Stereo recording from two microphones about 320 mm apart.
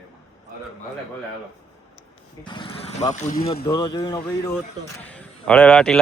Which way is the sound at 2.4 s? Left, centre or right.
Centre.